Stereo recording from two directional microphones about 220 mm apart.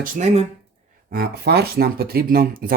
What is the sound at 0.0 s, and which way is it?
Speech, 30° right (ahead or behind).